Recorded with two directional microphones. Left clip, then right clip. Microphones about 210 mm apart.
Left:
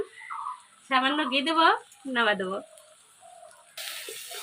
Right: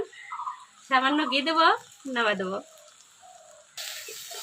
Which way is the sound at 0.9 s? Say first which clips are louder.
Right 1 dB; centre (ahead or behind).